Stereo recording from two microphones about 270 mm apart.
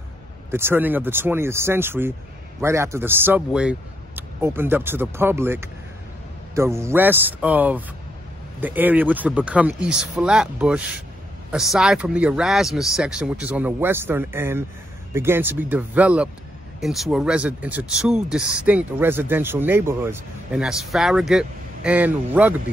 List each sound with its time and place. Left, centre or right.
0.5 s speech: centre